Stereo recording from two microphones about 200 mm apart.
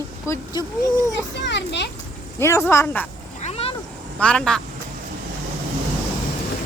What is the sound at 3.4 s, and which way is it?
Cat, 30° left (ahead or behind).